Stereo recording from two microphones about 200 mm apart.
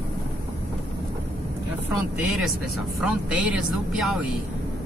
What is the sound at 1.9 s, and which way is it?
Speech, centre (ahead or behind).